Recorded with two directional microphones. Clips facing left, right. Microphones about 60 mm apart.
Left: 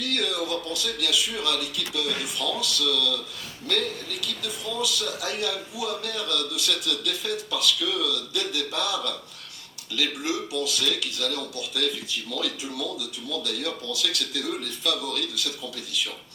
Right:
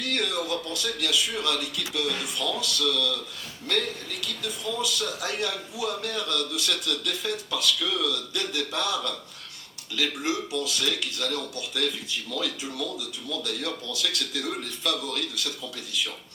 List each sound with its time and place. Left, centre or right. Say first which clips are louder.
0.0 s a man's voice: left 1 dB; right